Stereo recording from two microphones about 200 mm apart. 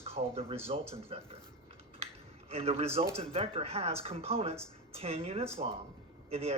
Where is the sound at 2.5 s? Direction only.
30° right (ahead or behind).